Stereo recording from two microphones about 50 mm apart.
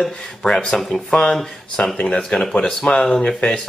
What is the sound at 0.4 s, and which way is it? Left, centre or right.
A man's voice, centre.